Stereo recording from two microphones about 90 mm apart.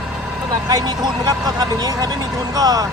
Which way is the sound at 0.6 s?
45° right (ahead or behind).